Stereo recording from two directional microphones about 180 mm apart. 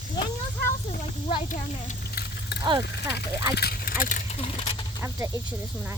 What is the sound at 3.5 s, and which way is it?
Speech, 55° left (ahead or behind).